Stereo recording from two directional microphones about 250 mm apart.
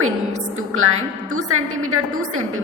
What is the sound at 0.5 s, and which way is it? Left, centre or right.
A woman's voice, right.